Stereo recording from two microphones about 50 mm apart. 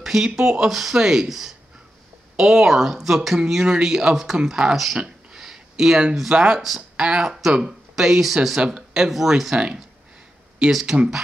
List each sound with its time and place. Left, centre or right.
0.0 s speech: centre